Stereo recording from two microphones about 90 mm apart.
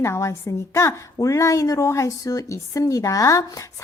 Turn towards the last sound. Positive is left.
turn(degrees=35)  # may be behind; listen again after turning